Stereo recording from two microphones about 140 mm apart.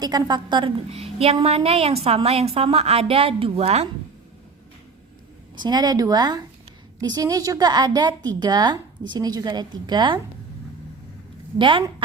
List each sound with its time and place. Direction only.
0.0 s a woman's voice: 30° right (ahead or behind)
0.9 s a woman's voice: 45° right (ahead or behind)
5.5 s a woman's voice: 30° right (ahead or behind)
11.5 s a woman's voice: 35° right (ahead or behind)